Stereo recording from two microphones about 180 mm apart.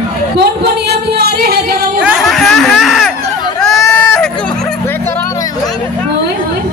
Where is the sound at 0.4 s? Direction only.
65° right (ahead or behind).